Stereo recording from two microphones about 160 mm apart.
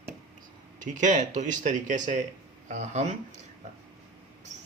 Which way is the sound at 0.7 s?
50° right (ahead or behind).